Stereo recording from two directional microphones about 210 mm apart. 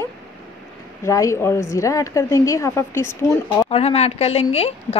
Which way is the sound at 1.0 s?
15° left (ahead or behind).